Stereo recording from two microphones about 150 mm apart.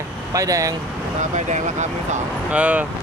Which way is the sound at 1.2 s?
55° right (ahead or behind).